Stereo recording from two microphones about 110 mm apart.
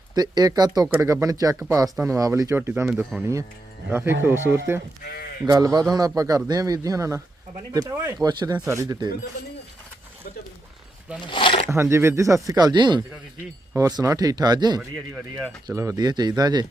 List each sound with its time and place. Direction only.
0.1 s speech: 40° right (ahead or behind); by 4.8 s 20° right (ahead or behind)
5.5 s speech: 35° right (ahead or behind)
8.5 s speech: 25° right (ahead or behind)
11.3 s speech: 50° left (ahead or behind)
11.7 s speech: 25° right (ahead or behind); by 13.0 s 45° right (ahead or behind)
13.7 s speech: 30° right (ahead or behind)
14.8 s speech: 5° right (ahead or behind)
15.6 s speech: 30° right (ahead or behind)